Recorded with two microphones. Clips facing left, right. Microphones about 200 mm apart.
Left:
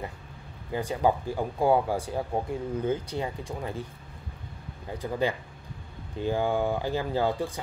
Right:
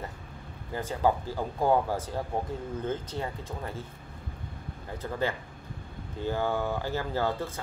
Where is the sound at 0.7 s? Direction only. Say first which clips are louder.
Left 2 dB; 15° left (ahead or behind).